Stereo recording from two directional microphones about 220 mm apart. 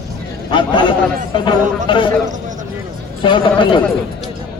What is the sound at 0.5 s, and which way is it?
Speech, 20° left (ahead or behind).